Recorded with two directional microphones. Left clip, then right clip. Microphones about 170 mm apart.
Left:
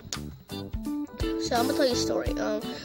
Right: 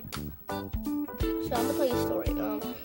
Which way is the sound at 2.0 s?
30° left (ahead or behind).